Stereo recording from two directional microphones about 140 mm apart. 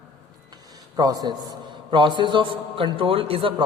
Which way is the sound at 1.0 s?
25° right (ahead or behind).